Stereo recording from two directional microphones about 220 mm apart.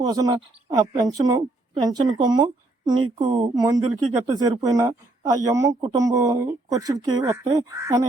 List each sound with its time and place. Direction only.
0.0 s a woman's voice: 20° right (ahead or behind)